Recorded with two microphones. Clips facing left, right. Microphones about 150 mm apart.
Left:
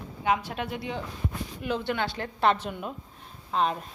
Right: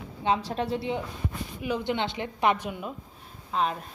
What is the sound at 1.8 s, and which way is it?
Speech, 20° right (ahead or behind).